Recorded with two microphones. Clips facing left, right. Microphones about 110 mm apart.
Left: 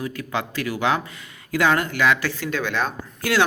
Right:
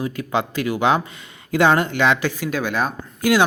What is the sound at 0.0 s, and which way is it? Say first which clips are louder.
Speech: right 4 dB; 20° right (ahead or behind).